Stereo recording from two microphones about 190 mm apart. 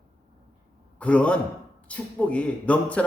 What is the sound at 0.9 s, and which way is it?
A man's voice, 5° left (ahead or behind).